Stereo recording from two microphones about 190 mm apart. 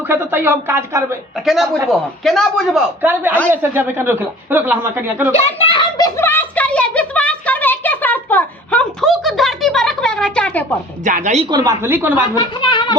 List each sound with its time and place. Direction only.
0.1 s speech: 10° right (ahead or behind)
1.5 s a man's voice: centre (ahead or behind)
3.0 s speech: 10° right (ahead or behind)
5.3 s a sound: 30° left (ahead or behind); by 10.7 s 5° left (ahead or behind)
11.0 s a woman's voice: 40° right (ahead or behind)
11.4 s speech: 15° right (ahead or behind)
12.3 s speech: 25° left (ahead or behind)